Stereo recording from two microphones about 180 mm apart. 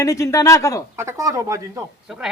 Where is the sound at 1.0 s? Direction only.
15° right (ahead or behind).